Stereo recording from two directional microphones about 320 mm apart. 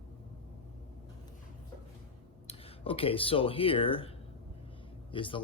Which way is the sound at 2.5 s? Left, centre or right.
Centre.